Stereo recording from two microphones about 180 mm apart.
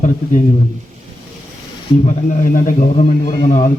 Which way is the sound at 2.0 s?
45° left (ahead or behind).